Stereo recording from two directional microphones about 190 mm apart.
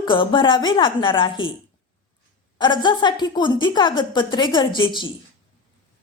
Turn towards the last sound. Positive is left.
turn(degrees=25)  # may be behind; listen again after turning